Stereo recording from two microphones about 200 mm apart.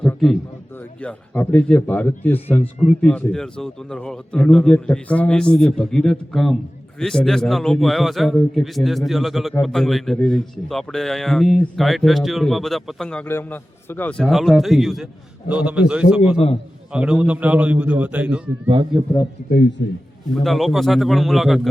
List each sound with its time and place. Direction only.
0.0 s a sound: 5° left (ahead or behind)
1.0 s a man's voice: 5° left (ahead or behind)
20.3 s a man's voice: centre (ahead or behind)